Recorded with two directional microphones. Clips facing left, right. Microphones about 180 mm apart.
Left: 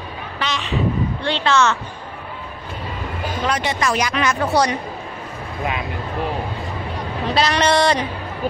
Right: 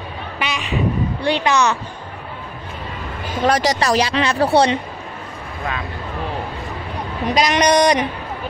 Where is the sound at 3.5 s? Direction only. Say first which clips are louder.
Right 5 dB; 40° right (ahead or behind).